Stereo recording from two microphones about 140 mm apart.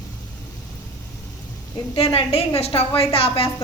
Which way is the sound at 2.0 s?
45° left (ahead or behind).